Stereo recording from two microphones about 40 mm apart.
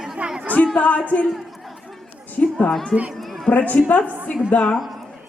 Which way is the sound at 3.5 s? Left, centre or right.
Left.